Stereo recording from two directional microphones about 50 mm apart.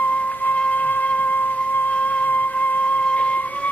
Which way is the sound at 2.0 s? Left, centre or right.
Left.